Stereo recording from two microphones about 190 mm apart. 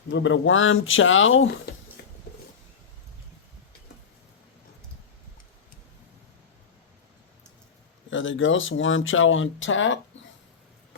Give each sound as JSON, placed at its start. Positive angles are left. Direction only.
{"t": 0.1, "sound": "speech", "side_deg": 80}
{"t": 2.0, "sound": "a sound", "side_deg": 55}
{"t": 8.1, "sound": "speech", "side_deg": 90}